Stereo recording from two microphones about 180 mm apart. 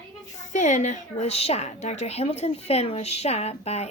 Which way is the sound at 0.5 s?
45° left (ahead or behind).